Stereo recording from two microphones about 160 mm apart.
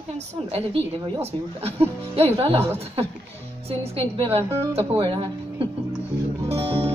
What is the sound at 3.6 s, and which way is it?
A woman's voice, 40° right (ahead or behind).